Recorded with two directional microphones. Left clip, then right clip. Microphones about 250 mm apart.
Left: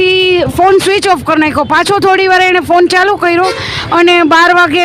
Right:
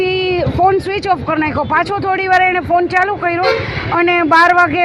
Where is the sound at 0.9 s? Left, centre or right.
Left.